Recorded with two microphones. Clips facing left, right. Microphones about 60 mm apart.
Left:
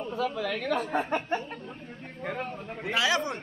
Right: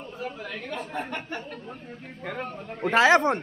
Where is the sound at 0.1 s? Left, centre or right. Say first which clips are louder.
Left 5 dB; left.